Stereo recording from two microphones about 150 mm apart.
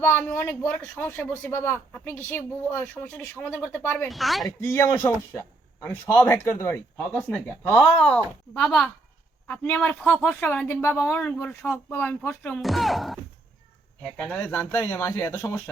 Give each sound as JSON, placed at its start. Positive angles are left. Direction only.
{"t": 0.0, "sound": "speech", "side_deg": 15}
{"t": 4.1, "sound": "speech", "side_deg": 0}
{"t": 4.4, "sound": "a man's voice", "side_deg": 20}
{"t": 6.9, "sound": "speech", "side_deg": 10}
{"t": 14.2, "sound": "speech", "side_deg": 10}